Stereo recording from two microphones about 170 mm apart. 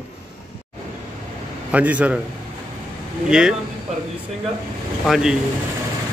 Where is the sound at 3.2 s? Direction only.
5° right (ahead or behind).